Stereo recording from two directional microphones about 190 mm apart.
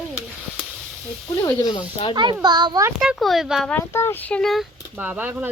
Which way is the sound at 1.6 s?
25° left (ahead or behind).